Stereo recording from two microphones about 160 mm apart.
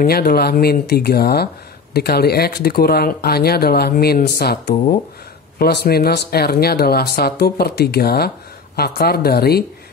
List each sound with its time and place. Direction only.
0.0 s speech: 70° left (ahead or behind)